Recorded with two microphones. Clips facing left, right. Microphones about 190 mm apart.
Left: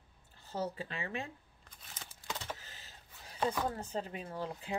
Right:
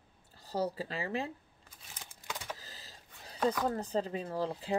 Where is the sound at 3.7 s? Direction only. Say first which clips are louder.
Right 6 dB; 35° right (ahead or behind).